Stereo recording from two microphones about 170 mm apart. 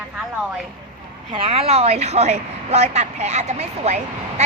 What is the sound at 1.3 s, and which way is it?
A woman's voice, 35° right (ahead or behind).